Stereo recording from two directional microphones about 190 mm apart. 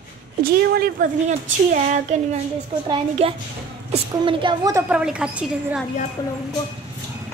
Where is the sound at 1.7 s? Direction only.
40° right (ahead or behind).